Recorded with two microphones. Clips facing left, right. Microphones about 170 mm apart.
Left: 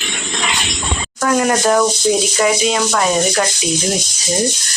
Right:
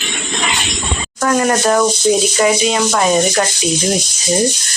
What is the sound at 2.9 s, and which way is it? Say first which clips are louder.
Sanding: right 2 dB; 15° right (ahead or behind).